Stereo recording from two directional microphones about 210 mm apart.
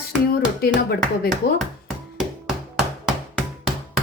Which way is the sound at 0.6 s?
50° left (ahead or behind).